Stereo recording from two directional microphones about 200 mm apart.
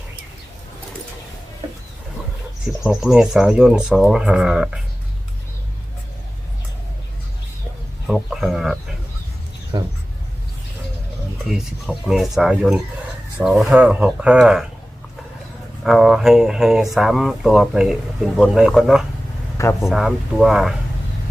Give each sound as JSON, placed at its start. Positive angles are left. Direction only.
{"t": 2.8, "sound": "speech", "side_deg": 0}
{"t": 8.0, "sound": "speech", "side_deg": 0}
{"t": 9.7, "sound": "speech", "side_deg": -25}
{"t": 11.4, "sound": "speech", "side_deg": 0}
{"t": 15.8, "sound": "speech", "side_deg": 0}